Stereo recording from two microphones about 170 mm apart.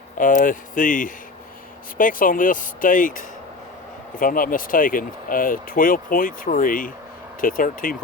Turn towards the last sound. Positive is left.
turn(degrees=55)  # may be behind; listen again after turning